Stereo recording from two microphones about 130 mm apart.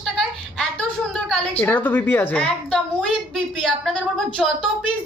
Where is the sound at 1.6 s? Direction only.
15° left (ahead or behind).